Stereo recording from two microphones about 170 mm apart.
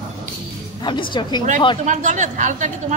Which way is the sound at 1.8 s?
45° right (ahead or behind).